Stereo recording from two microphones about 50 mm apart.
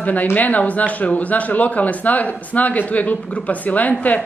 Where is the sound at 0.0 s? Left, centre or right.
Left.